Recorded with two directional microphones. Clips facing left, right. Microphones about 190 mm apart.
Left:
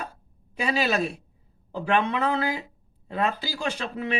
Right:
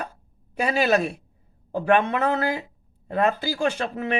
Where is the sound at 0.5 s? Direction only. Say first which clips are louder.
Right 4 dB; 50° right (ahead or behind).